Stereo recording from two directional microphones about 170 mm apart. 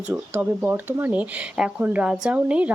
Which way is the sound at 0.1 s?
10° right (ahead or behind).